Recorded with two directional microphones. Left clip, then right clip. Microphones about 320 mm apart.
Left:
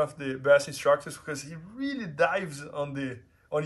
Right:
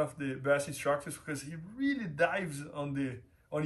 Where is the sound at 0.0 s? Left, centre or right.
Centre.